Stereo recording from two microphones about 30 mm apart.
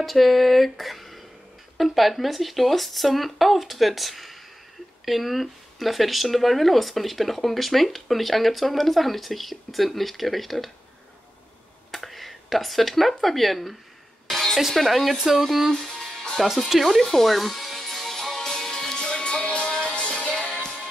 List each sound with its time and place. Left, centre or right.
0.0 s speech: centre
11.9 s speech: centre
14.2 s music: centre
14.6 s speech: centre
17.2 s music: centre
18.4 s music: centre
18.9 s music: left
20.0 s music: left